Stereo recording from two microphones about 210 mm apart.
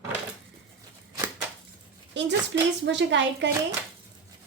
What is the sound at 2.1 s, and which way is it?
A woman's voice, 60° right (ahead or behind).